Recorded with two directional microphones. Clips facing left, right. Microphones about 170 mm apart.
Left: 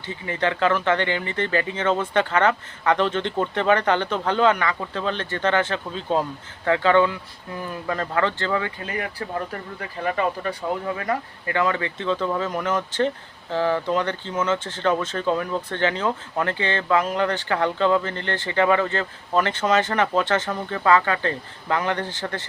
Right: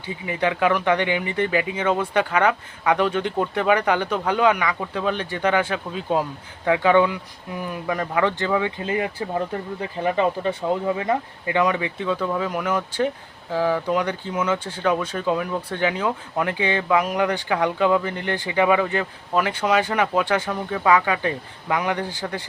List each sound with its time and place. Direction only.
0.1 s speech: 10° right (ahead or behind)